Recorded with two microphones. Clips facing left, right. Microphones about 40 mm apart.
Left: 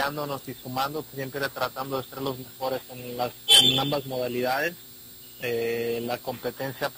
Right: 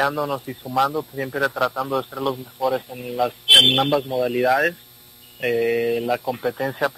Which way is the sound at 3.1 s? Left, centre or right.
Centre.